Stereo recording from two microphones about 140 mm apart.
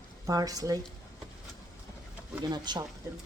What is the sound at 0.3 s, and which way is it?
Speech, 25° right (ahead or behind).